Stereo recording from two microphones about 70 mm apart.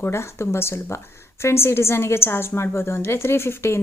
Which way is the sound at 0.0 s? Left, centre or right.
Left.